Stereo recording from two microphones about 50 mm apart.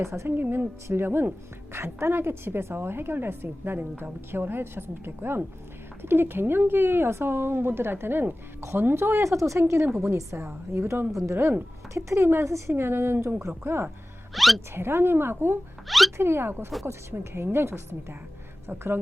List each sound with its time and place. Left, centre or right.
0.0 s a woman's voice: right
0.3 s a woman's voice: right
9.2 s speech: right
10.0 s a woman's voice: right
12.5 s a woman's voice: right
12.7 s a woman's voice: right
14.3 s speech: centre
14.8 s a woman's voice: right
15.9 s speech: centre
16.1 s a woman's voice: right